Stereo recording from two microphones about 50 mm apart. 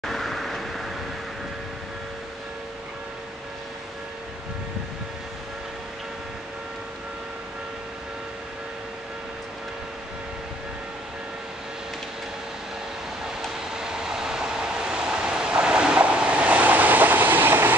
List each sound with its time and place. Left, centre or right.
0.0 s vehicle: centre
13.7 s vehicle: centre; by 17.7 s right